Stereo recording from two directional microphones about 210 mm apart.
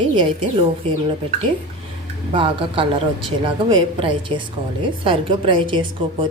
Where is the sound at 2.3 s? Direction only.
25° right (ahead or behind).